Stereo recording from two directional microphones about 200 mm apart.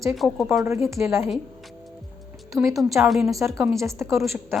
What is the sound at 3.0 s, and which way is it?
Speech, centre (ahead or behind).